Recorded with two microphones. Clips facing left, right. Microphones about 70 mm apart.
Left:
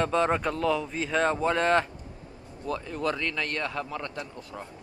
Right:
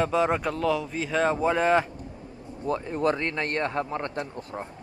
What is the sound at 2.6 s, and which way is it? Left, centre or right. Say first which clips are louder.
Speech: right 4 dB; right.